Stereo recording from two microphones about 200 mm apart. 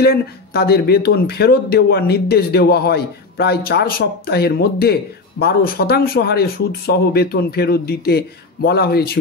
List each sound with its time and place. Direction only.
0.0 s speech: 50° left (ahead or behind)